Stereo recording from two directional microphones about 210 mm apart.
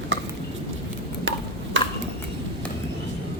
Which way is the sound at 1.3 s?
60° right (ahead or behind).